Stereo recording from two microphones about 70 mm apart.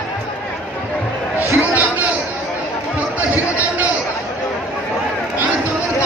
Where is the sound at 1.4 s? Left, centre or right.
Right.